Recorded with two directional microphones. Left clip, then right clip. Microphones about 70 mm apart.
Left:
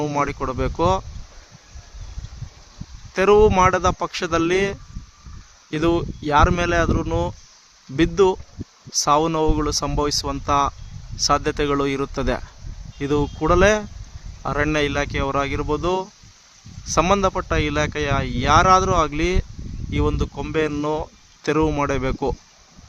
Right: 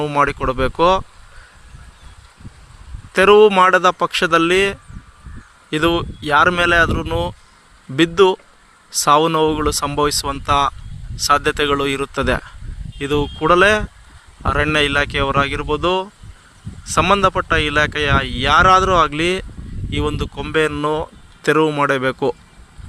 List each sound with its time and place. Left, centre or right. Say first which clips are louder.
0.2 s speech: right 10 dB; right
3.1 s speech: right 5 dB; right; by 22.4 s centre